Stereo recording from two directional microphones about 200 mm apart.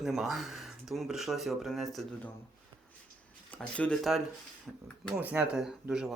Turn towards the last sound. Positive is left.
turn(degrees=-5)  # may be behind; listen again after turning